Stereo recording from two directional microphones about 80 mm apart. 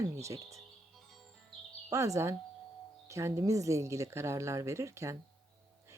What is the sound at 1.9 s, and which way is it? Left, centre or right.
Speech, right.